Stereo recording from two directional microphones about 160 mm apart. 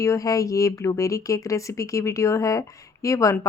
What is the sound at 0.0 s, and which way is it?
Speech, 20° left (ahead or behind).